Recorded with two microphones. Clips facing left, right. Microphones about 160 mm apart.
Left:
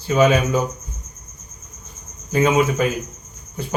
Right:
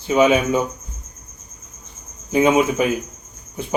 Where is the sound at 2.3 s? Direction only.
15° right (ahead or behind).